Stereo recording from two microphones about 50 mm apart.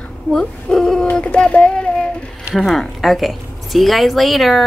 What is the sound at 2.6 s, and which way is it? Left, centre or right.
A woman's voice, centre.